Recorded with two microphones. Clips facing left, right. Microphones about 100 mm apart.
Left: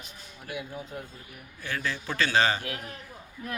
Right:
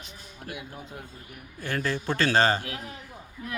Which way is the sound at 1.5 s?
40° right (ahead or behind).